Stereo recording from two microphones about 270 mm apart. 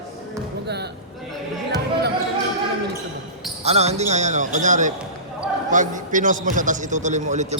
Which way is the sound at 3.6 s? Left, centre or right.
Right.